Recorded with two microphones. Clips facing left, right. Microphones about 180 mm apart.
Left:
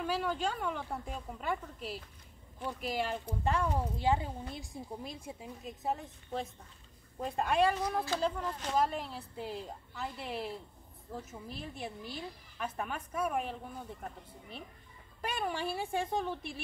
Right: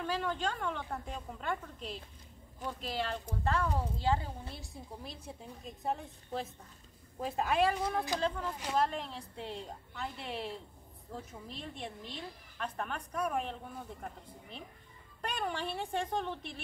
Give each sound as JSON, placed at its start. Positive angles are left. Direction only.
{"t": 0.0, "sound": "a woman's voice", "side_deg": 10}
{"t": 8.5, "sound": "speech", "side_deg": -10}
{"t": 8.7, "sound": "a woman's voice", "side_deg": 5}
{"t": 15.2, "sound": "speech", "side_deg": 5}